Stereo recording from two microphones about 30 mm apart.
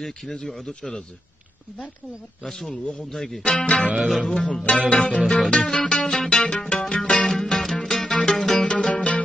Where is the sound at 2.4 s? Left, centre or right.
Centre.